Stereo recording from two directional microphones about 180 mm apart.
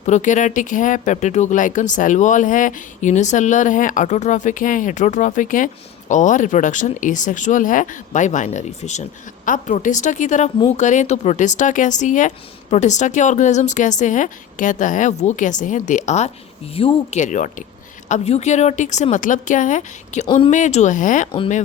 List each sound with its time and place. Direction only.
0.0 s a woman's voice: 40° left (ahead or behind)